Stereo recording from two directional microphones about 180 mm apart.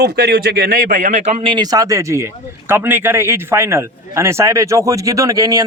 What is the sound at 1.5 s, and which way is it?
Speech, 20° right (ahead or behind).